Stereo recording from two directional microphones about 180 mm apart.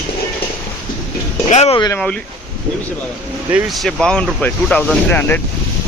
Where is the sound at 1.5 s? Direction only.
40° left (ahead or behind).